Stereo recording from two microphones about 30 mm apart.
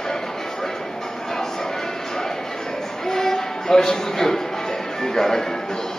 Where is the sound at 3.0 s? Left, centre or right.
Centre.